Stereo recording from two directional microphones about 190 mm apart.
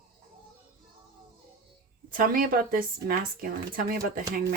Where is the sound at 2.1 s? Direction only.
45° right (ahead or behind).